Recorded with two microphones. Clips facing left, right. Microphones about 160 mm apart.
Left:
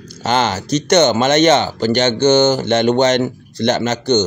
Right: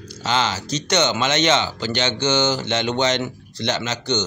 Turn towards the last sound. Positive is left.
turn(degrees=50)  # may be behind; listen again after turning